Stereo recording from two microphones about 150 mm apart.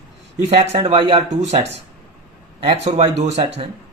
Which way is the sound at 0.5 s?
40° right (ahead or behind).